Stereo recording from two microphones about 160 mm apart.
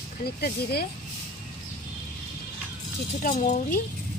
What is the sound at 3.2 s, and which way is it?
Speech, 55° left (ahead or behind).